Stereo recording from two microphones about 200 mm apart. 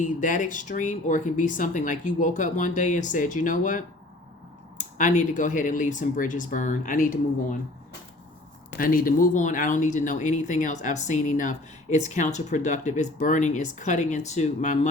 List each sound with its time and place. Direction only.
0.0 s speech: 40° left (ahead or behind)
8.8 s speech: 45° left (ahead or behind)